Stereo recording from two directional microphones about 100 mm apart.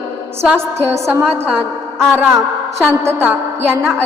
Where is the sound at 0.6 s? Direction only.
25° right (ahead or behind).